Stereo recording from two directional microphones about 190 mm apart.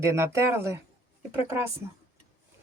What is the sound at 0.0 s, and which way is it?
Speech, 15° right (ahead or behind).